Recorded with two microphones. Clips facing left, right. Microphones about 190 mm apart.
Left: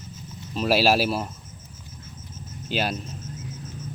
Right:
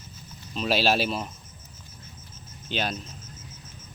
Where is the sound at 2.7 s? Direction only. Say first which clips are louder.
Left 3 dB; 5° left (ahead or behind).